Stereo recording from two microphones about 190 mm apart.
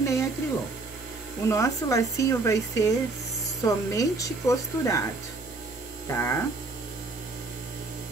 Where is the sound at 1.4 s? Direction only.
15° left (ahead or behind).